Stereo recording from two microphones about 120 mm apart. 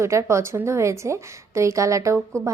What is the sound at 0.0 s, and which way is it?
A woman's voice, 25° right (ahead or behind).